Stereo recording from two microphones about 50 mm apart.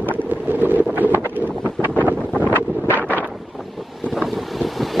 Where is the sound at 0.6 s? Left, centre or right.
Right.